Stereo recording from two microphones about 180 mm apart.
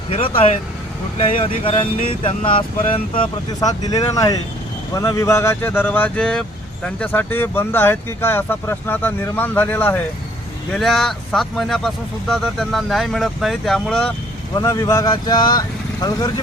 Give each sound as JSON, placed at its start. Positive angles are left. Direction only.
{"t": 0.1, "sound": "speech", "side_deg": 30}
{"t": 1.6, "sound": "speech", "side_deg": 30}
{"t": 14.6, "sound": "speech", "side_deg": 15}